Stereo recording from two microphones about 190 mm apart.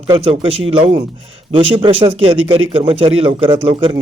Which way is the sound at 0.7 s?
35° right (ahead or behind).